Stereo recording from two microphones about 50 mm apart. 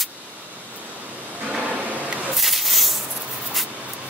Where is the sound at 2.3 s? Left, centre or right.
Centre.